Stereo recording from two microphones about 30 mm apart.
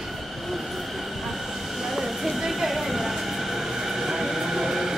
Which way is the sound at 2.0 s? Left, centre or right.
Centre.